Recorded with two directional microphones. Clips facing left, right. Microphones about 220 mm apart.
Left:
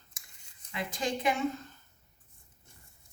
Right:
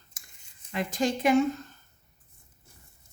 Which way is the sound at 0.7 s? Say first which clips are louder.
Right 6 dB; 45° right (ahead or behind).